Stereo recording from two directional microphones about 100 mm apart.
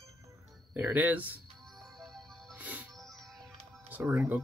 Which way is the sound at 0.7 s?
15° right (ahead or behind).